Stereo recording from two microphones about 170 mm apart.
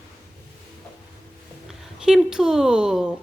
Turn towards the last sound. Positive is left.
turn(degrees=-5)  # may be behind; listen again after turning